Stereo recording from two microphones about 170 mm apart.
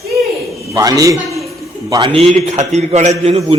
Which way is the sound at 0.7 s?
20° right (ahead or behind).